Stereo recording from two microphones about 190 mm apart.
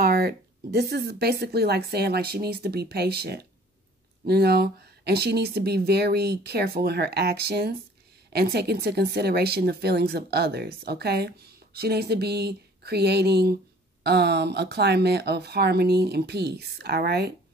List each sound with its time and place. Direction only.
0.0 s speech: 55° right (ahead or behind)